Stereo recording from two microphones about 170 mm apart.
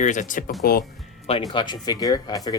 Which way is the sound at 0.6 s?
65° left (ahead or behind).